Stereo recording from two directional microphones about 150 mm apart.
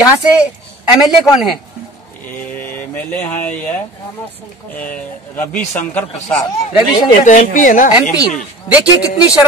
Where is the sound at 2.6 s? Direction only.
10° left (ahead or behind).